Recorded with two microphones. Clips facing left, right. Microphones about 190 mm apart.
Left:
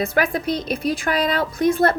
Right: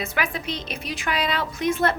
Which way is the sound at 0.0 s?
35° left (ahead or behind).